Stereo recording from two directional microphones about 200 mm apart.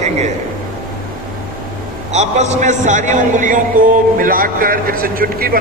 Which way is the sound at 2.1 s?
35° right (ahead or behind).